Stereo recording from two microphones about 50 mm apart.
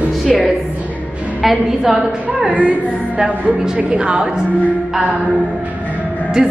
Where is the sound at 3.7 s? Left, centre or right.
Centre.